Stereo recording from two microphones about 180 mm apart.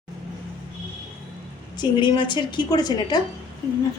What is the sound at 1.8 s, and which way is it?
A woman's voice, 25° left (ahead or behind).